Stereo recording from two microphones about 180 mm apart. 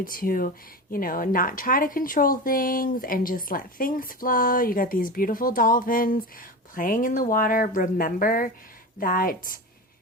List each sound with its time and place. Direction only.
0.0 s speech: 50° left (ahead or behind)